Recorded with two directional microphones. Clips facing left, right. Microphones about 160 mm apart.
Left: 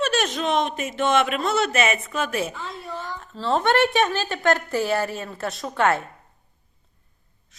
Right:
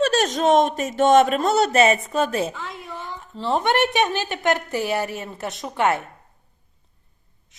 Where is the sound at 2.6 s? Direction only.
15° right (ahead or behind).